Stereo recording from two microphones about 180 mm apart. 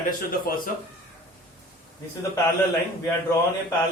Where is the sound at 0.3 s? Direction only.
55° left (ahead or behind).